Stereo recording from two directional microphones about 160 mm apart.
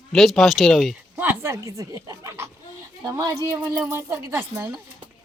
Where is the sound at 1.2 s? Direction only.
15° right (ahead or behind).